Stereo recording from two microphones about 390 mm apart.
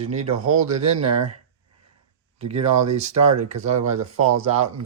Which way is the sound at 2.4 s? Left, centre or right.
Right.